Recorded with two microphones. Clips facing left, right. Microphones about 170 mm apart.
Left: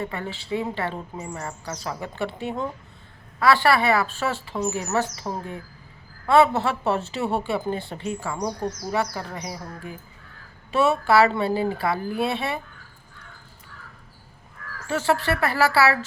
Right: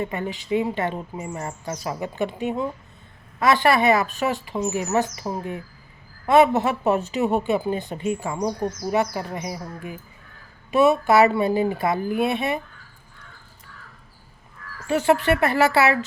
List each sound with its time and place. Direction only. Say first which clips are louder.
0.0 s speech: right 3 dB; 20° right (ahead or behind)
14.8 s a woman's voice: right 4 dB; 15° right (ahead or behind)